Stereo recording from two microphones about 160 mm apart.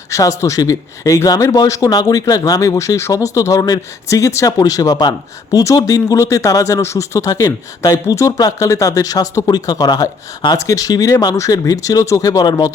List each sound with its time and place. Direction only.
0.1 s a man's voice: 20° left (ahead or behind)